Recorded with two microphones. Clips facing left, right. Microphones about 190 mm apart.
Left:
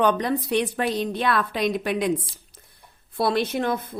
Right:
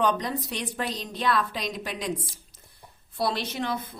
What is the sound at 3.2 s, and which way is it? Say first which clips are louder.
Speech: left 6 dB; 55° left (ahead or behind).